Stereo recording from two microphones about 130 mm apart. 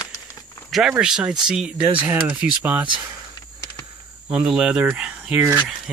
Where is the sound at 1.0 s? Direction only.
5° right (ahead or behind).